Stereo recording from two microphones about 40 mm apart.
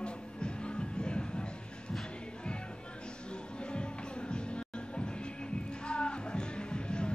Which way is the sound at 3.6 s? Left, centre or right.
Left.